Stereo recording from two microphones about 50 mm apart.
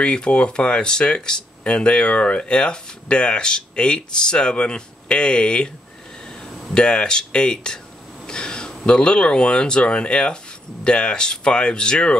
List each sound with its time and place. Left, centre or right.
0.0 s speech: centre
6.7 s speech: centre